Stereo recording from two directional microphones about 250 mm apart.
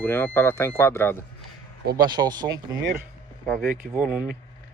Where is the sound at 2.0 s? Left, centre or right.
Centre.